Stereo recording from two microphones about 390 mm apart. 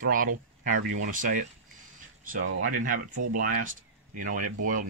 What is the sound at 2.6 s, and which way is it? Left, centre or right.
Speech, right.